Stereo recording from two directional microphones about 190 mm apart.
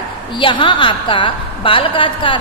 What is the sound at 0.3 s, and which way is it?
A woman's voice, 25° left (ahead or behind).